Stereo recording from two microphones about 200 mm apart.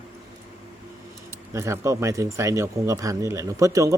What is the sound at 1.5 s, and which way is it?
Speech, 15° right (ahead or behind).